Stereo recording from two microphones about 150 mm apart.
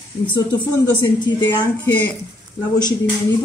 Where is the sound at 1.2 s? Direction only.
30° left (ahead or behind).